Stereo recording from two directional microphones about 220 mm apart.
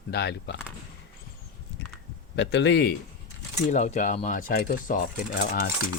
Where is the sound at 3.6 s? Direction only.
35° left (ahead or behind).